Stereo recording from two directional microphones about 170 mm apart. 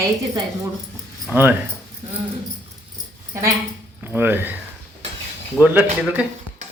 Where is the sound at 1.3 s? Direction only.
10° right (ahead or behind).